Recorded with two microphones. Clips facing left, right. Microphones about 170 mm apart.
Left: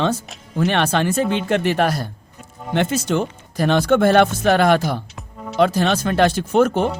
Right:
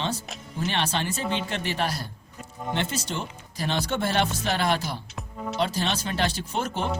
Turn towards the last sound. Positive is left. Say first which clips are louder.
# left 12 dB
turn(degrees=50)  # may be behind; listen again after turning